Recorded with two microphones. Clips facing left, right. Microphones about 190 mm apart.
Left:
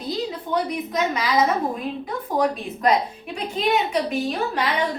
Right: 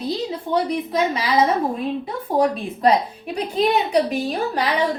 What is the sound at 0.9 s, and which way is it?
A woman's voice, 30° right (ahead or behind).